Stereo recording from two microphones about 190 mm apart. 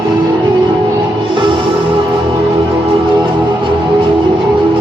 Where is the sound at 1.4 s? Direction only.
25° right (ahead or behind).